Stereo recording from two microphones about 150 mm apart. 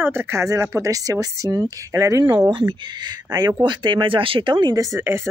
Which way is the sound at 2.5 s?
35° right (ahead or behind).